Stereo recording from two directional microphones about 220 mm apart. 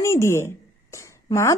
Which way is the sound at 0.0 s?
10° left (ahead or behind).